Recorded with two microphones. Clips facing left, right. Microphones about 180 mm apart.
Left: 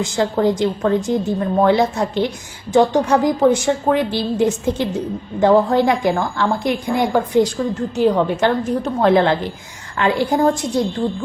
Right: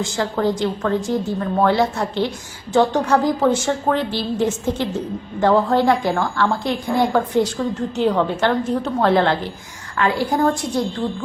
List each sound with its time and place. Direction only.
0.0 s a woman's voice: 20° left (ahead or behind)